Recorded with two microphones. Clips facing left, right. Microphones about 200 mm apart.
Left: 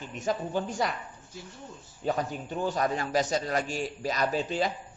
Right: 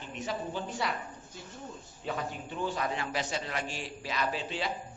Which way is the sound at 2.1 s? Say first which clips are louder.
Left 6 dB; 40° left (ahead or behind).